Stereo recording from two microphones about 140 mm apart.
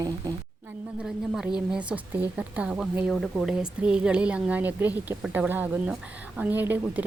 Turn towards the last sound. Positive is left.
turn(degrees=-15)  # may be behind; listen again after turning